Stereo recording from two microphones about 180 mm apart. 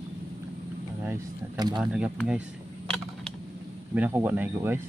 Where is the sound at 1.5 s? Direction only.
25° right (ahead or behind).